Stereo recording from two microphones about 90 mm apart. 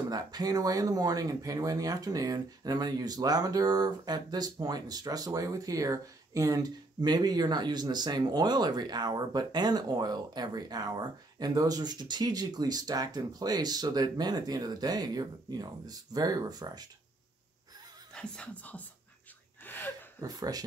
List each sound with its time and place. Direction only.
0.1 s speech: 45° right (ahead or behind)
18.1 s speech: 10° left (ahead or behind)
19.6 s gasp: 20° left (ahead or behind)
20.2 s speech: 45° right (ahead or behind)